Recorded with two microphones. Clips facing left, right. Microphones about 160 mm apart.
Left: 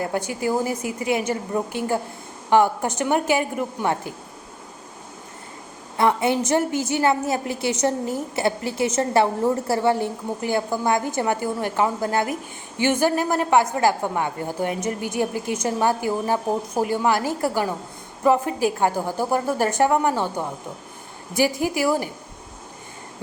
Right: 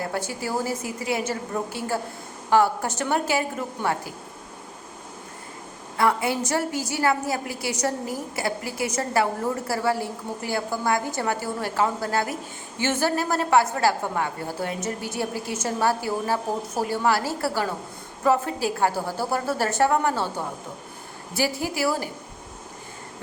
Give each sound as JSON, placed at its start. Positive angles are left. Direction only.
{"t": 0.1, "sound": "a woman's voice", "side_deg": 15}
{"t": 6.0, "sound": "a woman's voice", "side_deg": 20}
{"t": 21.3, "sound": "a woman's voice", "side_deg": 15}